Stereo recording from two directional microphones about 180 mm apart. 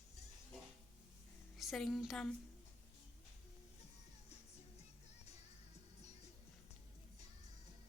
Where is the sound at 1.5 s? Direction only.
Centre (ahead or behind).